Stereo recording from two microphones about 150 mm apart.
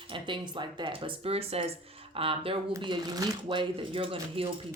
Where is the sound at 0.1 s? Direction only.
30° right (ahead or behind).